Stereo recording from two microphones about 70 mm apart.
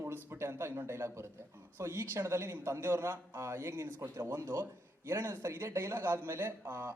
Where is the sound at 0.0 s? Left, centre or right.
Right.